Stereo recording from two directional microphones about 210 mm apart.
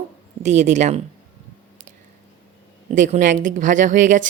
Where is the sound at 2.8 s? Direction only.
35° right (ahead or behind).